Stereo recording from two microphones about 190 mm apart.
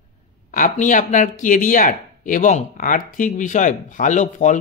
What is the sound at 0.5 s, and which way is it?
Speech, 45° left (ahead or behind).